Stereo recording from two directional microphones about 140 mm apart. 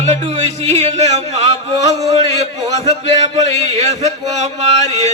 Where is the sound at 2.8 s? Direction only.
50° right (ahead or behind).